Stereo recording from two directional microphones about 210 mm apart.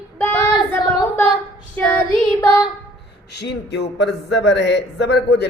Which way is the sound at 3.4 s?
55° left (ahead or behind).